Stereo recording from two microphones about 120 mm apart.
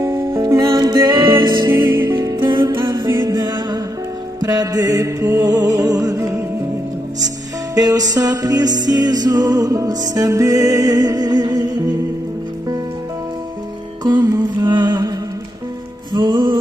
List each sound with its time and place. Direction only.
0.0 s music: 20° right (ahead or behind)
0.7 s music: 40° right (ahead or behind)
3.1 s music: 20° right (ahead or behind)
3.3 s music: 35° right (ahead or behind)
7.7 s music: 30° right (ahead or behind)
14.0 s music: 35° right (ahead or behind)
16.1 s music: 40° right (ahead or behind)